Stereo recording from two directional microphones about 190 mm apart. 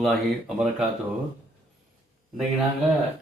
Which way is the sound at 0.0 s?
Centre (ahead or behind).